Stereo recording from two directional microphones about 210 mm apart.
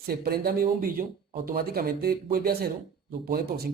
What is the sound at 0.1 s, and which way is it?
Speech, 45° right (ahead or behind).